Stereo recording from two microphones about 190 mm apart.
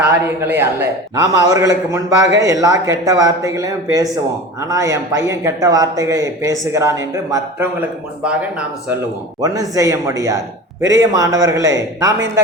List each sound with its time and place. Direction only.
0.0 s speech: 10° right (ahead or behind)
9.4 s speech: 15° right (ahead or behind)